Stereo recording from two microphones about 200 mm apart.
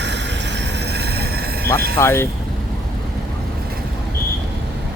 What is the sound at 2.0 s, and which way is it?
Speech, 15° left (ahead or behind).